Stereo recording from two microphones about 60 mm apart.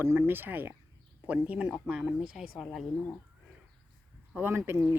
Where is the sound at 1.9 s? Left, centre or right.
Centre.